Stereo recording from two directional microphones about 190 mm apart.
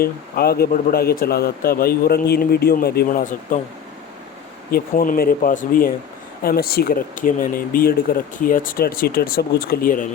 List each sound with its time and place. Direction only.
0.0 s speech: 55° left (ahead or behind)
4.7 s speech: 50° left (ahead or behind)